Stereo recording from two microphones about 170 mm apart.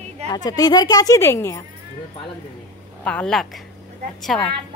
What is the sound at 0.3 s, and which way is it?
Speech, 25° left (ahead or behind).